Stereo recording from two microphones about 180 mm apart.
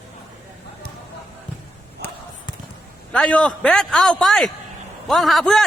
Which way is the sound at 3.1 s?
5° left (ahead or behind).